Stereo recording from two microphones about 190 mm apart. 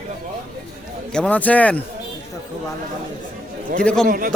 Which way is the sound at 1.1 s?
5° left (ahead or behind).